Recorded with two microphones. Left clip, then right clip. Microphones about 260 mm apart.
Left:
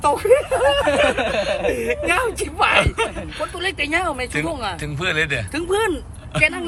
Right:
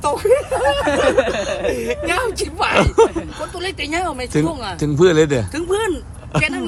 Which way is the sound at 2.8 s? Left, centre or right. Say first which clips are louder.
Right 8 dB; centre.